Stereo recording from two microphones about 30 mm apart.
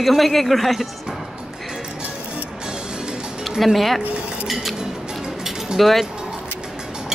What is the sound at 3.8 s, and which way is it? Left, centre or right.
Speech, centre.